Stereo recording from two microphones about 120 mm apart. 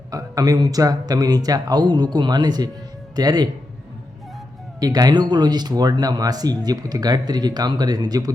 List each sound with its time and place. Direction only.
0.1 s speech: 30° right (ahead or behind)
4.8 s speech: 30° right (ahead or behind)